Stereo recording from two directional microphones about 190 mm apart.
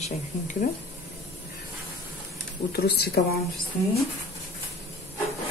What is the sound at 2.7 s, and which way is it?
Speech, 55° left (ahead or behind).